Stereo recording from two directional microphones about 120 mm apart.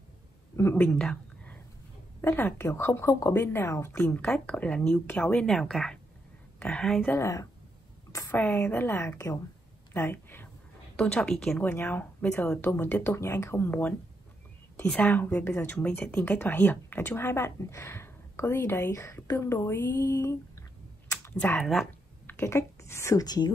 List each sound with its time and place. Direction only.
0.6 s a woman's voice: 15° left (ahead or behind)
7.1 s a woman's voice: 25° left (ahead or behind)
21.1 s a sound: 20° left (ahead or behind)
21.5 s speech: centre (ahead or behind)
22.2 s a woman's voice: 20° left (ahead or behind); by 23.5 s 35° left (ahead or behind)